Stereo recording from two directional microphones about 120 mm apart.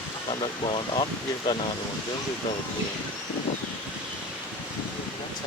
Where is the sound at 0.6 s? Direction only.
50° left (ahead or behind).